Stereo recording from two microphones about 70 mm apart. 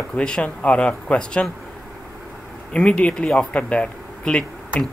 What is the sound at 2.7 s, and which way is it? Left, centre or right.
Speech, centre.